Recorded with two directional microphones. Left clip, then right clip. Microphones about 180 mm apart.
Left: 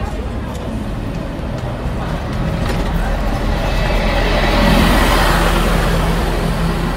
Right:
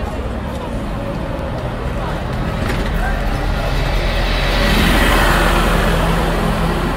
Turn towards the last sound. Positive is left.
turn(degrees=5)  # may be behind; listen again after turning